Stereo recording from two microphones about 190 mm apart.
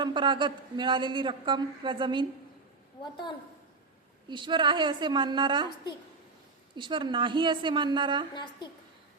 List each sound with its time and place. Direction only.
0.0 s speech: 25° right (ahead or behind)
3.0 s a woman's voice: 25° left (ahead or behind)
4.3 s speech: 25° right (ahead or behind)
6.7 s speech: 25° right (ahead or behind)